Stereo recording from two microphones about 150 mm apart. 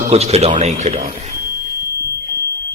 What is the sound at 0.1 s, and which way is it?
Speech, 45° right (ahead or behind).